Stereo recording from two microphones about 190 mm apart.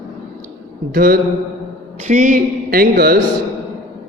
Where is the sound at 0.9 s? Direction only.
50° right (ahead or behind).